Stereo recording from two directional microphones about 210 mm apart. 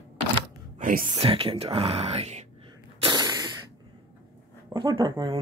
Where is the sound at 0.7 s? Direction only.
40° right (ahead or behind).